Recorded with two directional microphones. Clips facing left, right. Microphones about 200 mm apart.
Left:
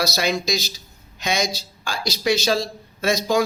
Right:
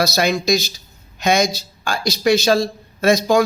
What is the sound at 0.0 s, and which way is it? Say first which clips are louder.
Speech: right 4 dB; 50° right (ahead or behind).